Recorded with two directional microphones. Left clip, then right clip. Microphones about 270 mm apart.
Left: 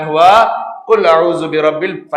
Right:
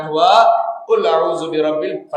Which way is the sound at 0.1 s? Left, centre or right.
Left.